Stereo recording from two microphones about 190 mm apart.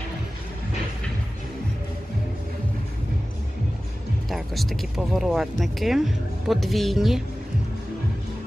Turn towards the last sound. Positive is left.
turn(degrees=0)  # may be behind; listen again after turning